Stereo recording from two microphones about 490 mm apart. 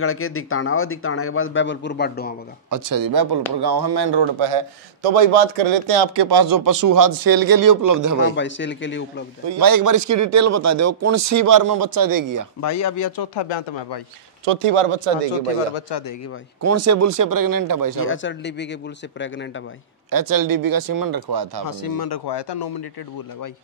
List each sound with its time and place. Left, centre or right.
0.0 s a man's voice: left
2.7 s speech: right
6.1 s a man's voice: right
8.4 s a man's voice: left
9.5 s a man's voice: right
12.5 s a man's voice: left
14.4 s speech: right
15.9 s a man's voice: left
16.6 s a man's voice: right
18.0 s a man's voice: left
20.1 s speech: right
21.6 s a man's voice: left